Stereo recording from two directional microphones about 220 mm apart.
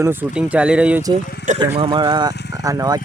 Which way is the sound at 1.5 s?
20° right (ahead or behind).